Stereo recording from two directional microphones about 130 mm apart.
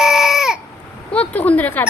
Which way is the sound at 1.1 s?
10° left (ahead or behind).